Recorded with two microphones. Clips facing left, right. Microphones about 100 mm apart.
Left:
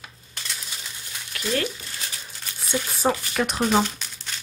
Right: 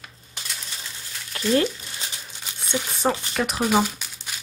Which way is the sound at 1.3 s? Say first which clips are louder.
Right 5 dB; 30° right (ahead or behind).